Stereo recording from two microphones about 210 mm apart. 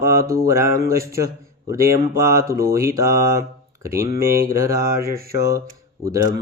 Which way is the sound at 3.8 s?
15° right (ahead or behind).